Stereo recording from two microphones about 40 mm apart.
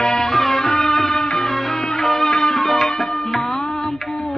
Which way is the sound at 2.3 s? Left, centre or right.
Centre.